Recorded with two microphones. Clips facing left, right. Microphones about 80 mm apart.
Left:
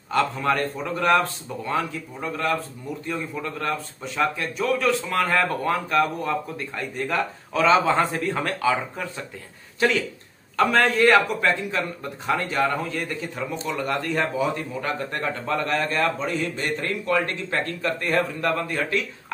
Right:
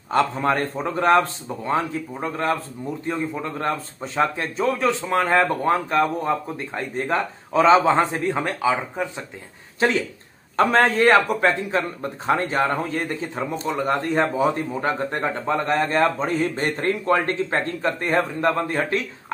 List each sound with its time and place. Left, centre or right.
0.1 s a man's voice: right